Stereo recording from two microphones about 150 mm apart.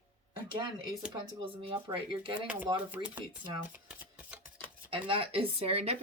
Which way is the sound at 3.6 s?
10° right (ahead or behind).